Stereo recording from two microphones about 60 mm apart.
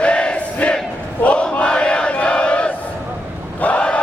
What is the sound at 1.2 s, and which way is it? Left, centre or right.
Battle cry, centre.